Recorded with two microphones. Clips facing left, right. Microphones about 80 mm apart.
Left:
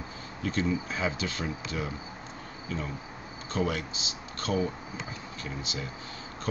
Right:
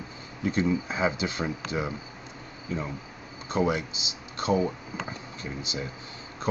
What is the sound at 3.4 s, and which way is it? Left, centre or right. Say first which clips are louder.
Speech: right 4 dB; centre.